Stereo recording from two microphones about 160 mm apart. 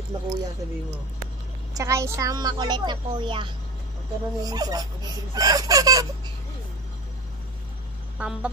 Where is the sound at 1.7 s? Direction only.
20° right (ahead or behind).